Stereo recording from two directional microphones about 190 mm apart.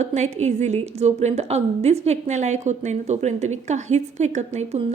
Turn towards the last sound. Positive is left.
turn(degrees=-35)  # may be behind; listen again after turning